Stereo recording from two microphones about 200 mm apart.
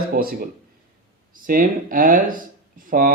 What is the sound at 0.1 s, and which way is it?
Speech, 50° right (ahead or behind).